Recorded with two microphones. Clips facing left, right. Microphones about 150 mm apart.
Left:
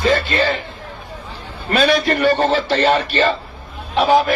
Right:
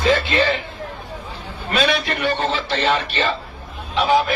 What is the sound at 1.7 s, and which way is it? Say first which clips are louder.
A man's voice: left 5 dB; 45° left (ahead or behind).